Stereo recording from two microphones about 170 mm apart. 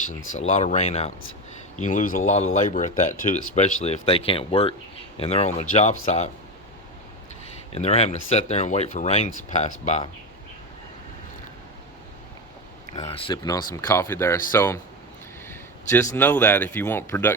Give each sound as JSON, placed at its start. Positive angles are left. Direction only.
{"t": 0.1, "sound": "speech", "side_deg": 45}
{"t": 1.8, "sound": "speech", "side_deg": 45}
{"t": 7.7, "sound": "speech", "side_deg": 35}
{"t": 13.0, "sound": "speech", "side_deg": 35}
{"t": 13.4, "sound": "speech", "side_deg": 20}
{"t": 15.4, "sound": "a sound", "side_deg": 15}
{"t": 16.1, "sound": "speech", "side_deg": 10}